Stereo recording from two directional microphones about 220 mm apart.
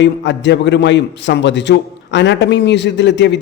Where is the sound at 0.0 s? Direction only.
55° left (ahead or behind).